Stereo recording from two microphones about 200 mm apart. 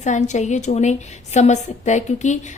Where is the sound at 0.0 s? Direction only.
35° left (ahead or behind).